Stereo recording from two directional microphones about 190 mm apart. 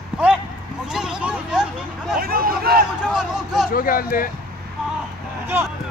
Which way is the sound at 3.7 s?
50° left (ahead or behind).